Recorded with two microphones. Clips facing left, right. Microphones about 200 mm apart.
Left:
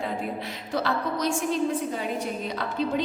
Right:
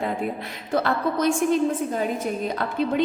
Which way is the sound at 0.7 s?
55° right (ahead or behind).